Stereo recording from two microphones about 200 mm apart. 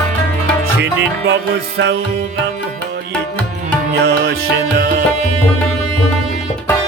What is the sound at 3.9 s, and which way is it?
Music, 55° right (ahead or behind).